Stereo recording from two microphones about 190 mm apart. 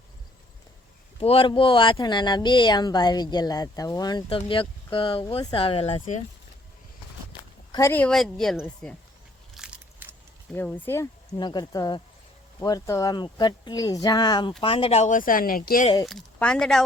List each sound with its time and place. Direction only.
1.2 s speech: 30° left (ahead or behind)
7.7 s a woman's voice: 15° left (ahead or behind)
9.6 s crushing: 5° right (ahead or behind)
10.5 s speech: 10° left (ahead or behind); by 15.9 s 50° left (ahead or behind)
16.0 s a woman's voice: 5° left (ahead or behind)